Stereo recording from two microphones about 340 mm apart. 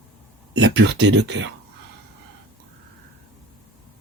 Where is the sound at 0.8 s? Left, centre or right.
Right.